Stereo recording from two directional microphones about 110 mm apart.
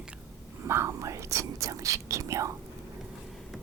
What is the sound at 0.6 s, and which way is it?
Speech, 25° right (ahead or behind).